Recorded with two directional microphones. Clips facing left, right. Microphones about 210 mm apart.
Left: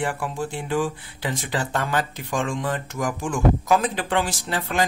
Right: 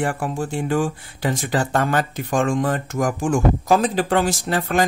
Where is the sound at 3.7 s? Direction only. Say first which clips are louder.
Right 4 dB; 35° right (ahead or behind).